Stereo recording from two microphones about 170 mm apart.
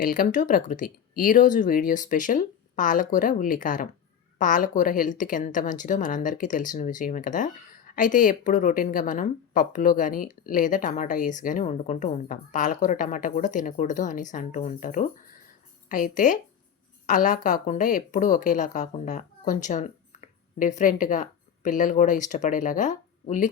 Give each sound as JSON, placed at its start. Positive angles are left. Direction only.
{"t": 0.0, "sound": "a woman's voice", "side_deg": 55}